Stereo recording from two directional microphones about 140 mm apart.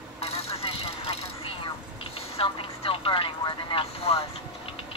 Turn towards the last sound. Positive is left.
turn(degrees=45)  # may be behind; listen again after turning